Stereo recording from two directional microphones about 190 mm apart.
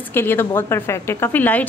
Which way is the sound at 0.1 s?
10° left (ahead or behind).